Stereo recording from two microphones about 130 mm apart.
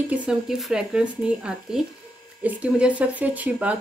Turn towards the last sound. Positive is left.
turn(degrees=-10)  # may be behind; listen again after turning